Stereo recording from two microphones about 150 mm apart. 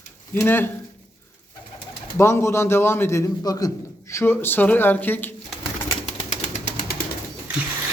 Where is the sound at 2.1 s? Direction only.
15° left (ahead or behind).